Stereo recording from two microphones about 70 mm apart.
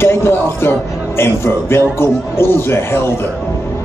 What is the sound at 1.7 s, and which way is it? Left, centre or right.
A man's voice, left.